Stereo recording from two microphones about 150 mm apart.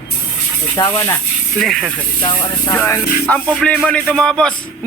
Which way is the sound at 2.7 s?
20° left (ahead or behind).